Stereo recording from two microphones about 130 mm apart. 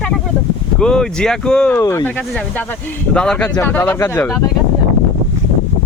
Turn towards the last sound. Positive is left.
turn(degrees=15)  # may be behind; listen again after turning